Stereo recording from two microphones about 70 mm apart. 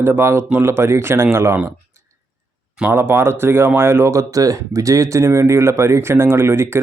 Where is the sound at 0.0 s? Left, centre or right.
Right.